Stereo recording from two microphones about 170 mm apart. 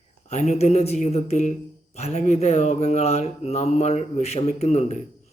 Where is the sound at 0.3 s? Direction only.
40° left (ahead or behind).